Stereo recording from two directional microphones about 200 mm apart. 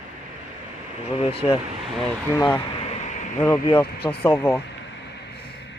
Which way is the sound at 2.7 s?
30° left (ahead or behind).